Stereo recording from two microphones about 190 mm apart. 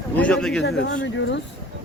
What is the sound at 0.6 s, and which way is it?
Speech, 70° left (ahead or behind).